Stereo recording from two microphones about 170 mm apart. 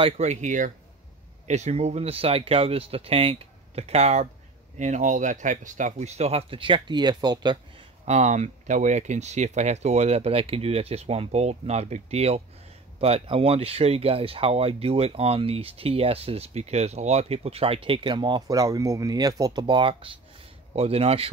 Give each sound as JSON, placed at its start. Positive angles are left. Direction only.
{"t": 0.0, "sound": "speech", "side_deg": -40}
{"t": 8.0, "sound": "speech", "side_deg": -40}